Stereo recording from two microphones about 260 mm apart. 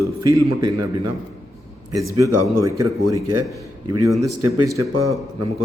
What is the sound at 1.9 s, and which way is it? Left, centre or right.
Speech, right.